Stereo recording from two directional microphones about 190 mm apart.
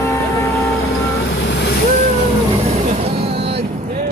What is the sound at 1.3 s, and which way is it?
Vehicle, 65° left (ahead or behind).